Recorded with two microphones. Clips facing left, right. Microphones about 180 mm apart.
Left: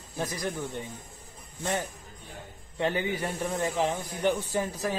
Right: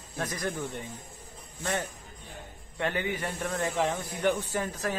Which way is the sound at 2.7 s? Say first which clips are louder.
Left 2 dB; 20° left (ahead or behind).